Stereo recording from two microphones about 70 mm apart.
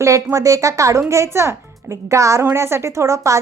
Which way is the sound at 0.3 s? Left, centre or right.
Right.